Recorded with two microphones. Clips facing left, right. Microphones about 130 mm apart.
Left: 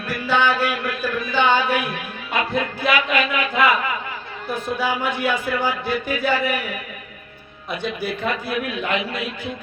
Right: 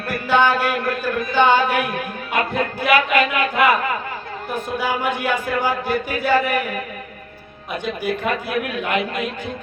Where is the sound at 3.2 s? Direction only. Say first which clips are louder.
Right 3 dB; 40° right (ahead or behind).